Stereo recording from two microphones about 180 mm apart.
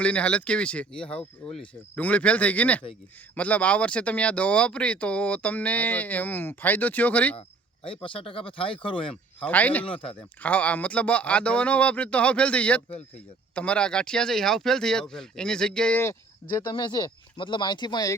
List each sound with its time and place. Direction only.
0.0 s speech: 5° left (ahead or behind)
7.9 s speech: 30° left (ahead or behind)
9.4 s speech: 10° left (ahead or behind)
10.0 s speech: 30° left (ahead or behind)
10.4 s speech: 10° left (ahead or behind)
16.6 s speech: 25° left (ahead or behind)